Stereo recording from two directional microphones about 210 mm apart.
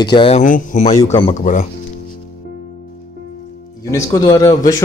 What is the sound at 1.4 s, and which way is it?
Speech, 35° left (ahead or behind).